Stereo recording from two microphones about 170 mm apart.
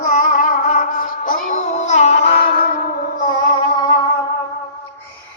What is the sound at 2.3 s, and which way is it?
Music, 75° left (ahead or behind).